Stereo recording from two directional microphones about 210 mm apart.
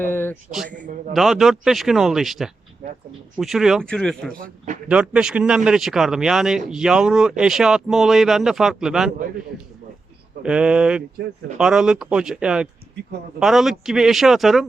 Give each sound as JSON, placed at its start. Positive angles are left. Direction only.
{"t": 0.0, "sound": "a sound", "side_deg": 10}
{"t": 0.5, "sound": "a man's voice", "side_deg": 0}
{"t": 0.8, "sound": "speech", "side_deg": -40}
{"t": 1.1, "sound": "a man's voice", "side_deg": 0}
{"t": 4.4, "sound": "speech", "side_deg": -40}
{"t": 4.9, "sound": "a man's voice", "side_deg": -5}
{"t": 10.4, "sound": "a man's voice", "side_deg": -5}